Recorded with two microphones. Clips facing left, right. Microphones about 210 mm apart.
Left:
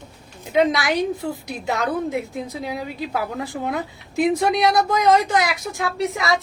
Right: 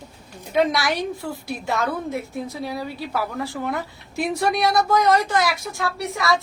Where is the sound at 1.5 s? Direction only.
20° left (ahead or behind).